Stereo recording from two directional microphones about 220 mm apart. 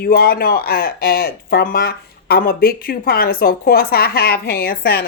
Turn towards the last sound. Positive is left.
turn(degrees=45)  # may be behind; listen again after turning